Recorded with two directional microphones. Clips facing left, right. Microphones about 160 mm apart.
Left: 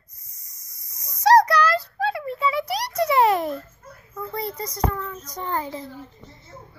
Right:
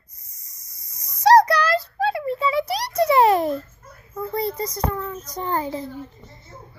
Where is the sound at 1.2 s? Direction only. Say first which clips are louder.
Right 1 dB; 30° right (ahead or behind).